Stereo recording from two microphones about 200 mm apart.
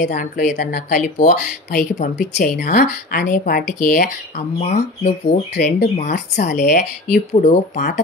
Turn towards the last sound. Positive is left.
turn(degrees=40)  # may be behind; listen again after turning